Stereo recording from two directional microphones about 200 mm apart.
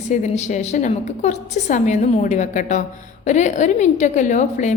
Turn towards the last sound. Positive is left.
turn(degrees=35)  # may be behind; listen again after turning